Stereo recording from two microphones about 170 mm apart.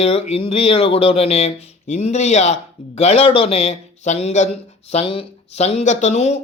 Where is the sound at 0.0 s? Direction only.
40° left (ahead or behind).